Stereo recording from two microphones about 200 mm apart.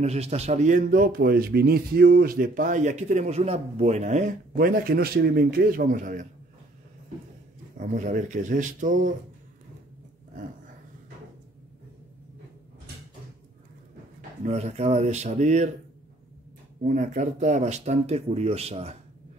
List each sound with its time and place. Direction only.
0.0 s speech: 35° right (ahead or behind)
7.7 s speech: 40° right (ahead or behind)
14.4 s speech: 35° right (ahead or behind)
16.8 s speech: 40° right (ahead or behind)